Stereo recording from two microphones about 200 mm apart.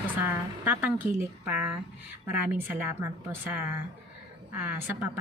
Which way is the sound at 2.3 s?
10° right (ahead or behind).